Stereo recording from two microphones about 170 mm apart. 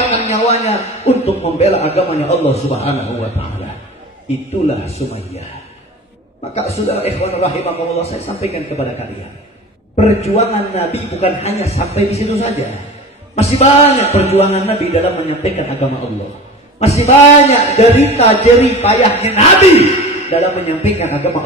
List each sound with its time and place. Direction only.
0.0 s a man's voice: 40° left (ahead or behind)
4.6 s a man's voice: 40° left (ahead or behind)
6.7 s a man's voice: 35° left (ahead or behind)
9.9 s a man's voice: 40° left (ahead or behind)
16.8 s a man's voice: 40° left (ahead or behind)